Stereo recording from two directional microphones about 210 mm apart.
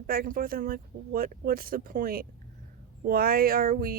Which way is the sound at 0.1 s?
45° right (ahead or behind).